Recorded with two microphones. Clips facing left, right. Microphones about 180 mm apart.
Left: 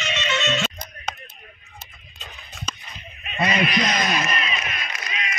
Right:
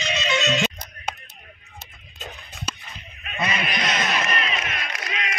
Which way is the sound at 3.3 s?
35° left (ahead or behind).